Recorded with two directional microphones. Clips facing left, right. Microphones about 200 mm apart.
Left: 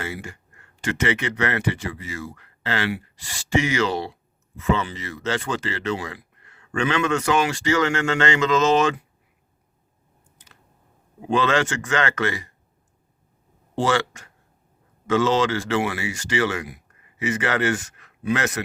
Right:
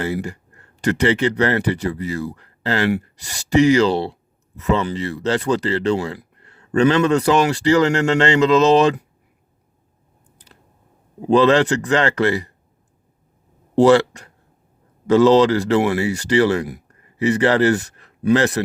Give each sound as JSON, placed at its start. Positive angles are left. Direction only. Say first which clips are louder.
{"t": 0.0, "sound": "speech", "louder": "right 9 dB", "side_deg": -35}
{"t": 10.3, "sound": "a sound", "louder": "right 6 dB", "side_deg": -35}
{"t": 11.3, "sound": "speech", "louder": "right 7 dB", "side_deg": -35}
{"t": 13.7, "sound": "speech", "louder": "right 10 dB", "side_deg": -35}